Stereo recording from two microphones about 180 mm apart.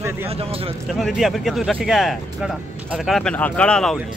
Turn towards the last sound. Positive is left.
turn(degrees=5)  # may be behind; listen again after turning